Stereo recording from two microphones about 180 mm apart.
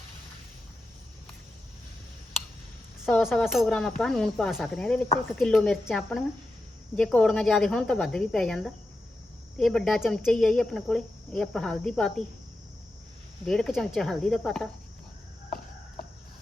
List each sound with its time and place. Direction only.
3.1 s speech: centre (ahead or behind)
13.4 s speech: centre (ahead or behind)
15.4 s a sound: 55° left (ahead or behind)